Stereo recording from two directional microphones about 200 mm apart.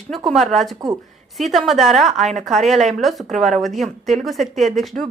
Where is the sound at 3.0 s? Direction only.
Centre (ahead or behind).